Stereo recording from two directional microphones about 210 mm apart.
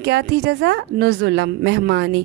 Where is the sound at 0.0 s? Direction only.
55° right (ahead or behind).